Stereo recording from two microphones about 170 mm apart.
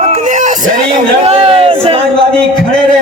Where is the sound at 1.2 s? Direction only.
35° right (ahead or behind).